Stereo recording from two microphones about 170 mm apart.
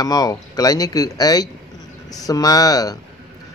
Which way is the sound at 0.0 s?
20° left (ahead or behind).